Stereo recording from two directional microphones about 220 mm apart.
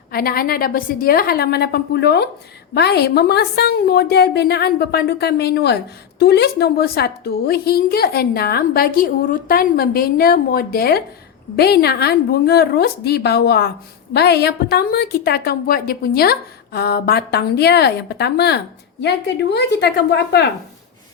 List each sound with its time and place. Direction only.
0.1 s a woman's voice: 45° left (ahead or behind)